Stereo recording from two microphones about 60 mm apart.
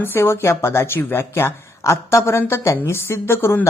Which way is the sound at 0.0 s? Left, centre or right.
Left.